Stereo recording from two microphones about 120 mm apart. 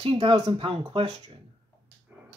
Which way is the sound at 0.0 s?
45° right (ahead or behind).